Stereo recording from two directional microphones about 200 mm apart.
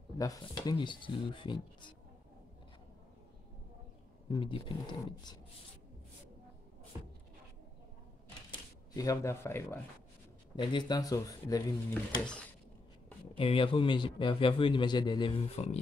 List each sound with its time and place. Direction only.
0.2 s a man's voice: 20° left (ahead or behind)
4.3 s a man's voice: 25° left (ahead or behind)
8.5 s speech: 20° left (ahead or behind)
10.5 s speech: 25° left (ahead or behind)
13.4 s a man's voice: 25° left (ahead or behind)